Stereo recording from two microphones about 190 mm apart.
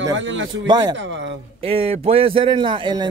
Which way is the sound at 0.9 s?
75° right (ahead or behind).